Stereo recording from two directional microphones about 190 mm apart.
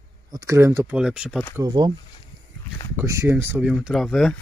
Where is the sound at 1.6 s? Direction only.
25° right (ahead or behind).